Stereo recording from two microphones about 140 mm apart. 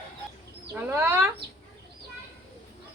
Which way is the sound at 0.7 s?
20° right (ahead or behind).